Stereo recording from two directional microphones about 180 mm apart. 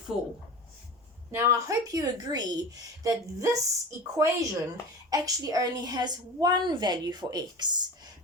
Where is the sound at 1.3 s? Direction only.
15° right (ahead or behind).